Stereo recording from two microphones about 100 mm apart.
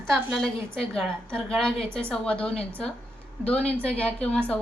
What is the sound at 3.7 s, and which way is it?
Speech, 20° right (ahead or behind).